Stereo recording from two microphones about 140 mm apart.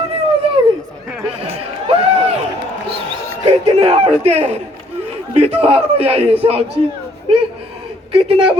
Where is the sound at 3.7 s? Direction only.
45° right (ahead or behind).